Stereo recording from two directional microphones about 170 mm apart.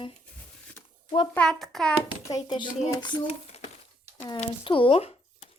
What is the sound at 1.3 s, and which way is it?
Speech, centre (ahead or behind).